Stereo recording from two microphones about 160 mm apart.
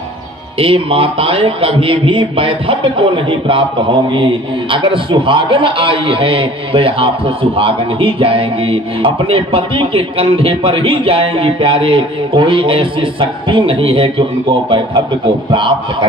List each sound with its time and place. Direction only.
0.6 s a man's voice: 35° right (ahead or behind)